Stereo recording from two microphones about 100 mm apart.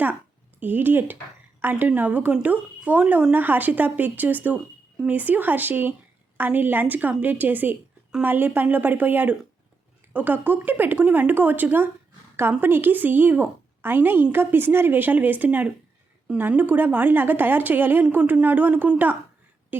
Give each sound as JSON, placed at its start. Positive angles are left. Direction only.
{"t": 0.6, "sound": "a woman's voice", "side_deg": -20}